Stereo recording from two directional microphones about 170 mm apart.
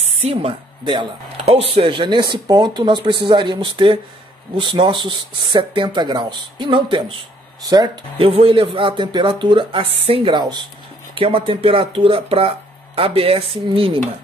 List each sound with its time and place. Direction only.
0.0 s speech: 40° right (ahead or behind)